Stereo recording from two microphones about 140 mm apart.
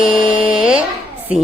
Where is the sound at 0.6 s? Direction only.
5° right (ahead or behind).